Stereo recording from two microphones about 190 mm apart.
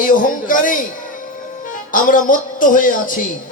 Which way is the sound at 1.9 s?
45° left (ahead or behind).